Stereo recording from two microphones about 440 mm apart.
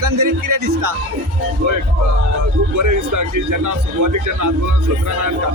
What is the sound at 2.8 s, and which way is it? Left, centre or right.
A man's voice, right.